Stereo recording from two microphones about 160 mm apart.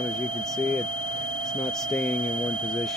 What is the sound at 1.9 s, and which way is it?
Speech, 10° left (ahead or behind).